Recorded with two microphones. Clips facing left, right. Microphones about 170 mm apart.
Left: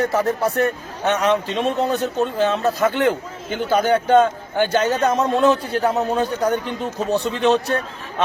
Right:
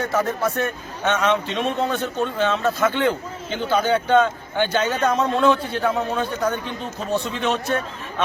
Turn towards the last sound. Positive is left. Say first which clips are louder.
# left 6 dB
turn(degrees=35)  # may be behind; listen again after turning